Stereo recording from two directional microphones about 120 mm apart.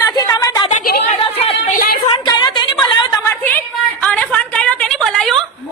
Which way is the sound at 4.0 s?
10° left (ahead or behind).